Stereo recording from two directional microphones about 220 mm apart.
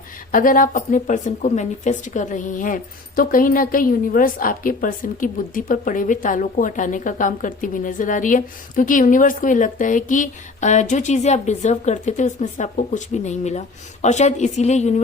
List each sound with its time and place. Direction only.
0.3 s speech: 40° left (ahead or behind)